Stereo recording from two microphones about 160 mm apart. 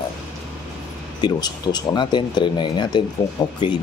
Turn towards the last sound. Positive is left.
turn(degrees=30)  # may be behind; listen again after turning